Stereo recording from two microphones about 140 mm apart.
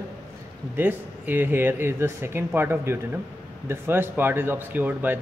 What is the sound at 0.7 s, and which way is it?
A man's voice, 15° right (ahead or behind).